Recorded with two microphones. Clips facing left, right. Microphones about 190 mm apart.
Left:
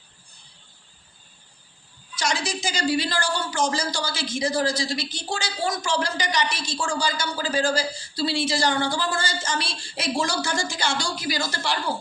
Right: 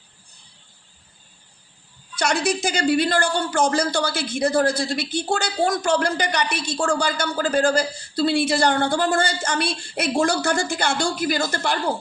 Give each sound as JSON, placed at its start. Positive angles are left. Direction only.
{"t": 2.1, "sound": "a woman's voice", "side_deg": -60}